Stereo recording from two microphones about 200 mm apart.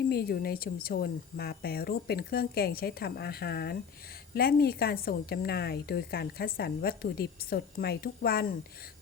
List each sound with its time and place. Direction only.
0.1 s a woman's voice: 50° left (ahead or behind)